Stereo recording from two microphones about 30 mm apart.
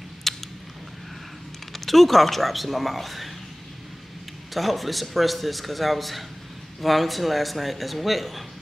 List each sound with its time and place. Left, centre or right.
0.3 s a sound: centre
1.7 s speech: centre
4.6 s speech: centre